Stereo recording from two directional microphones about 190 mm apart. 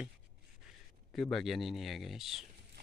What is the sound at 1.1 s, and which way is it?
Speech, centre (ahead or behind).